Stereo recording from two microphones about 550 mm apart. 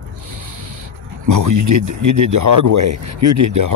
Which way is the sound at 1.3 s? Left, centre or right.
Right.